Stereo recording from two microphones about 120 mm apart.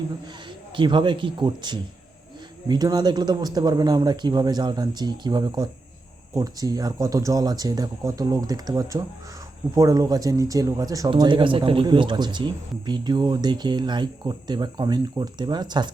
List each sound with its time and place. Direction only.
0.8 s speech: 40° right (ahead or behind)
11.1 s speech: 45° right (ahead or behind)